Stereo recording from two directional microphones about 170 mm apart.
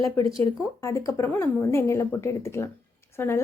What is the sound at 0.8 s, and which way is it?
A woman's voice, 15° left (ahead or behind).